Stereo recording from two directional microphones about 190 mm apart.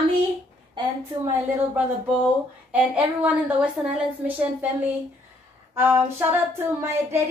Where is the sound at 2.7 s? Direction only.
5° right (ahead or behind).